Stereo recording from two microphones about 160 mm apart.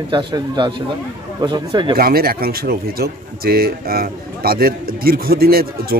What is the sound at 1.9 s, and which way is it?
Speech, 70° right (ahead or behind).